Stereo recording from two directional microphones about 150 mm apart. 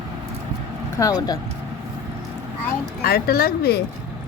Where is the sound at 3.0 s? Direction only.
90° left.